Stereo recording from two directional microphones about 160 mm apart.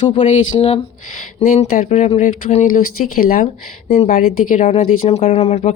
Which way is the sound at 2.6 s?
60° left (ahead or behind).